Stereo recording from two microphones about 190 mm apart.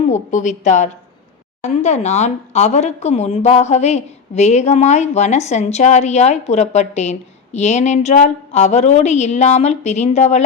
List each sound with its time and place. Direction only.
0.1 s speech: 40° left (ahead or behind)